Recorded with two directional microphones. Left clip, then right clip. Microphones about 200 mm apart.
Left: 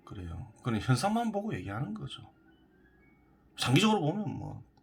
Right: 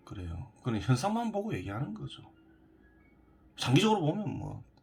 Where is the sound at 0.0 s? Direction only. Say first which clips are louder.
Right 1 dB; centre (ahead or behind).